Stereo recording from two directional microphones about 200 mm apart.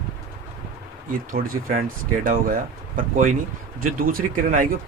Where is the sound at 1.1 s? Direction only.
45° right (ahead or behind).